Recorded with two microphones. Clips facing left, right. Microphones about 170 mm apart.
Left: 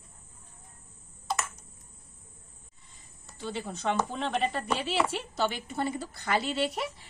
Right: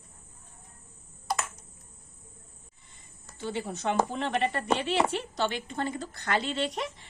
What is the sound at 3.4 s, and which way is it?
A woman's voice, 5° right (ahead or behind).